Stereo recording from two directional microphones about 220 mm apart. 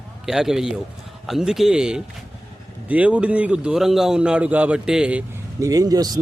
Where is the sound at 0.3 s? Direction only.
Centre (ahead or behind).